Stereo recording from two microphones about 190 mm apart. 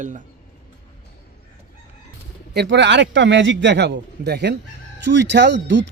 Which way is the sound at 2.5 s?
65° right (ahead or behind).